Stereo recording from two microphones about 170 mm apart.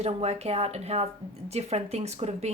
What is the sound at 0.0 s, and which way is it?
Speech, 40° right (ahead or behind).